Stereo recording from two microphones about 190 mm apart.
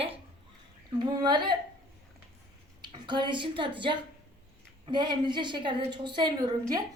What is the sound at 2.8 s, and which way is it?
A woman's voice, 25° right (ahead or behind).